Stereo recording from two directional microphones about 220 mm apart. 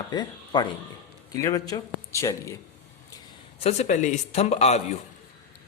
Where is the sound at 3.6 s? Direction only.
30° left (ahead or behind).